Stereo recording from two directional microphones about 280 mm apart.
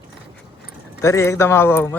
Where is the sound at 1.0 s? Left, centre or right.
Centre.